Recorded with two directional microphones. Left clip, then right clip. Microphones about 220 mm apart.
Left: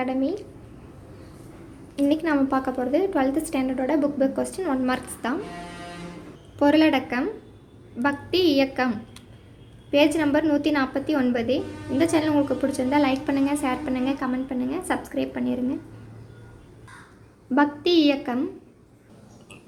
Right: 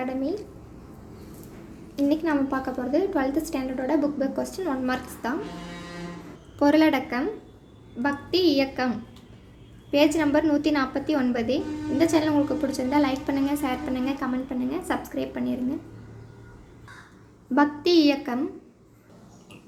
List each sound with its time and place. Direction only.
0.0 s a woman's voice: 15° left (ahead or behind)
2.0 s a woman's voice: 15° left (ahead or behind)
6.6 s a woman's voice: 10° left (ahead or behind)
17.5 s a woman's voice: 5° left (ahead or behind)